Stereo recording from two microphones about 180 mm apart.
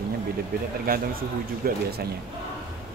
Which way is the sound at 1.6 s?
55° right (ahead or behind).